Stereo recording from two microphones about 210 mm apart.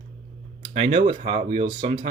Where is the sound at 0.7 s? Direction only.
35° right (ahead or behind).